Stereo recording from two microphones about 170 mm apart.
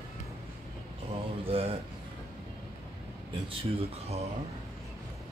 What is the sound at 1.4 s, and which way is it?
Speech, 35° right (ahead or behind).